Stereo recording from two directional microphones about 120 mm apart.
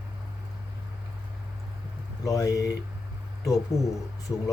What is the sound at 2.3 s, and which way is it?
Speech, 30° left (ahead or behind).